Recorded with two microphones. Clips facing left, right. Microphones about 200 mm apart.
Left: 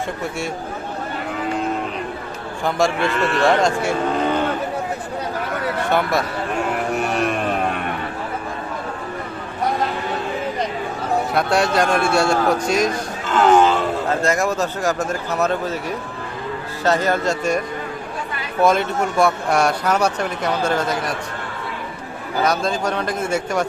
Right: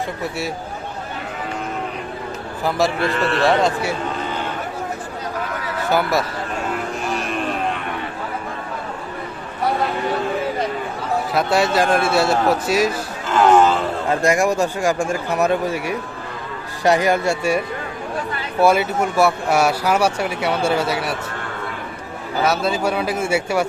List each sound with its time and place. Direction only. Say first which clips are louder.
0.2 s a man's voice: even; centre (ahead or behind)
2.6 s a man's voice: even; centre (ahead or behind)
5.9 s a man's voice: right 2 dB; centre (ahead or behind)
6.9 s music: left 3 dB; 60° left (ahead or behind)
11.3 s a man's voice: right 1 dB; centre (ahead or behind)
18.6 s speech: right 1 dB; 10° right (ahead or behind)
22.4 s speech: right 2 dB; 5° right (ahead or behind)